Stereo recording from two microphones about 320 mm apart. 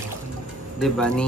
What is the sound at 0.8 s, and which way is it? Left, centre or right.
Speech, centre.